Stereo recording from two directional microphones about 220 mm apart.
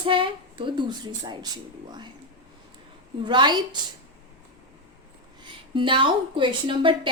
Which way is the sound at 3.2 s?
20° right (ahead or behind).